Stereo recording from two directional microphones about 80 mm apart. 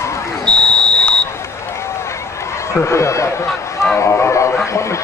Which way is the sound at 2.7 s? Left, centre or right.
Left.